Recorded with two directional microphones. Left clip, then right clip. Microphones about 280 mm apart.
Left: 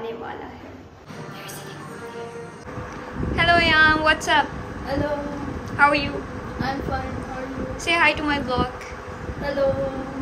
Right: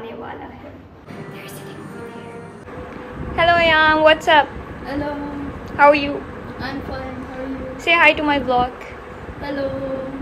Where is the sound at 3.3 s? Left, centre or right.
Centre.